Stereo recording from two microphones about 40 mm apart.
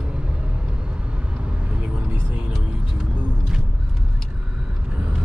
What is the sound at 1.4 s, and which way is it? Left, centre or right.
Vehicle, right.